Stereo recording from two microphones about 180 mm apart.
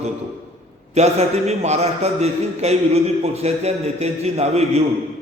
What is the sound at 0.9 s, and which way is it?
A man's voice, 35° right (ahead or behind).